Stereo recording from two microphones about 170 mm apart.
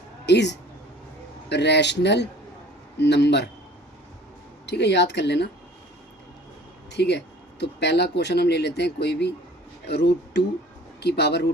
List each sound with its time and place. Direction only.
0.3 s speech: 90° left
4.6 s speech: 90° left
6.9 s speech: 80° left